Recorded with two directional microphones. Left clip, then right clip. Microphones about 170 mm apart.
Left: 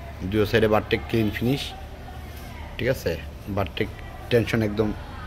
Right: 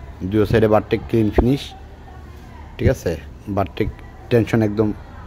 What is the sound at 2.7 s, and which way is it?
Speech, 60° right (ahead or behind).